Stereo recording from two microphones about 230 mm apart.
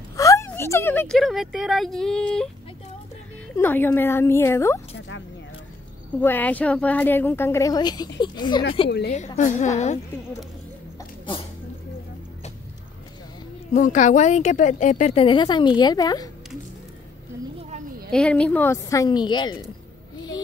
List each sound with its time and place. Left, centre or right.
0.2 s speech: centre
3.5 s a woman's voice: centre
6.2 s a woman's voice: centre
9.1 s a woman's voice: left
13.7 s speech: left; by 16.3 s centre
17.6 s sheep: right
18.1 s a woman's voice: centre